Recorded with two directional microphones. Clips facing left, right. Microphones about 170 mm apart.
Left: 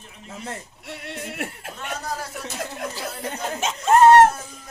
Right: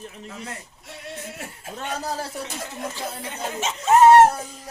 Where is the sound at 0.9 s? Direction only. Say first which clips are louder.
Left 2 dB; 70° left (ahead or behind).